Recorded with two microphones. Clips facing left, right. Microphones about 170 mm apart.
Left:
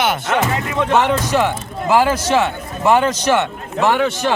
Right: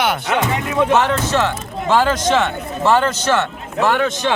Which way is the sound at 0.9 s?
15° left (ahead or behind).